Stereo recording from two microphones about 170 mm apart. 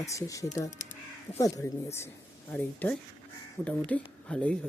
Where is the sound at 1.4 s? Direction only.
20° left (ahead or behind).